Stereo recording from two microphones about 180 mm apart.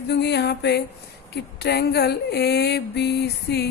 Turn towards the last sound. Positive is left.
turn(degrees=65)  # may be behind; listen again after turning